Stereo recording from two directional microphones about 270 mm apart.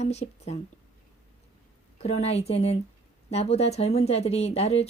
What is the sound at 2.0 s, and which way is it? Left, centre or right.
Speech, left.